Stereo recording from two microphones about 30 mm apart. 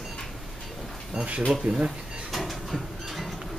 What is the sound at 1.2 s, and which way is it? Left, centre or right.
Speech, right.